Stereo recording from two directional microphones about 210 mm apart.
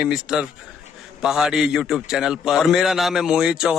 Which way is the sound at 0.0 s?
5° right (ahead or behind).